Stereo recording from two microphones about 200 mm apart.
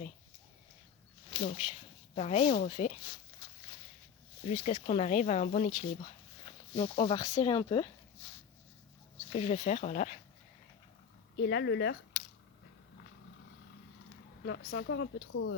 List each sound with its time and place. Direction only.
1.3 s speech: 30° left (ahead or behind)
4.4 s speech: 35° left (ahead or behind)
9.3 s speech: 35° left (ahead or behind)
11.3 s speech: 60° left (ahead or behind)
14.4 s speech: 60° left (ahead or behind); by 15.5 s 75° left (ahead or behind)